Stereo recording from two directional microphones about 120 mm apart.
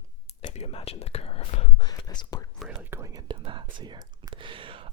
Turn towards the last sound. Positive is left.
turn(degrees=-50)  # may be behind; listen again after turning